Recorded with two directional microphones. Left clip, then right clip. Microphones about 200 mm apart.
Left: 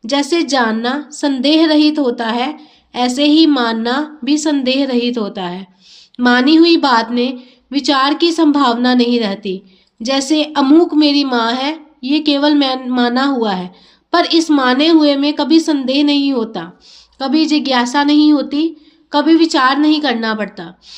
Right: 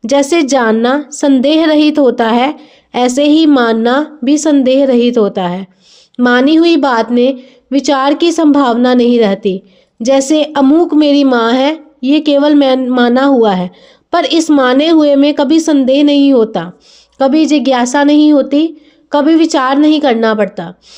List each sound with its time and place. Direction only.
0.0 s a woman's voice: 50° right (ahead or behind)